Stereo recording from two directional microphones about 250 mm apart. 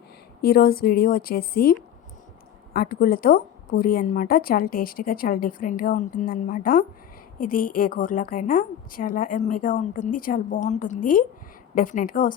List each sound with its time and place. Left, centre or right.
0.4 s a woman's voice: left
2.7 s a woman's voice: left